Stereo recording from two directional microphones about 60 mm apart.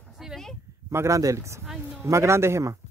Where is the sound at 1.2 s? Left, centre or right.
Right.